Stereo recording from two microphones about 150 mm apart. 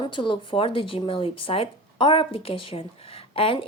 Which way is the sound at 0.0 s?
35° left (ahead or behind).